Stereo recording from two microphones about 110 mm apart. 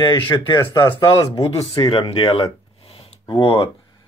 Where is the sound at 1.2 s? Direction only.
40° left (ahead or behind).